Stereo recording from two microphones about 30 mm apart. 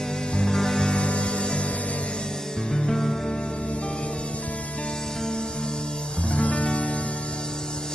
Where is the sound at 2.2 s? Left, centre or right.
Centre.